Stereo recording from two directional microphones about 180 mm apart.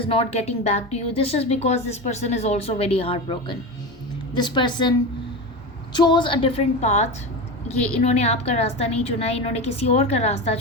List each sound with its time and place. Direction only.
0.0 s a woman's voice: 30° left (ahead or behind)
6.0 s a woman's voice: 25° left (ahead or behind)